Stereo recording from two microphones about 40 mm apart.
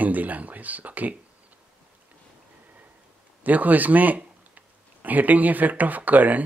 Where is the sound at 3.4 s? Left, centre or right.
Right.